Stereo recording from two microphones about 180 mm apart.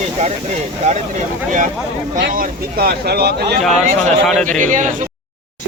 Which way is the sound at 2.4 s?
55° right (ahead or behind).